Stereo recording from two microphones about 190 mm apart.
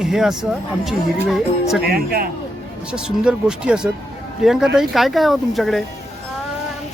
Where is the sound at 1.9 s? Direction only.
55° right (ahead or behind).